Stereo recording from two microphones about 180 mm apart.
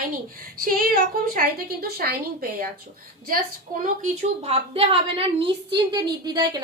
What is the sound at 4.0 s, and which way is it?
A woman's voice, 35° right (ahead or behind).